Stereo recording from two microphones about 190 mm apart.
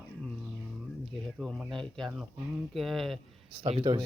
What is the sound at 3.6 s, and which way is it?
Speech, 30° right (ahead or behind).